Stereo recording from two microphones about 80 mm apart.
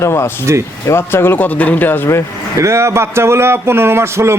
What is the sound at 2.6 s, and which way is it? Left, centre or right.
Speech, right.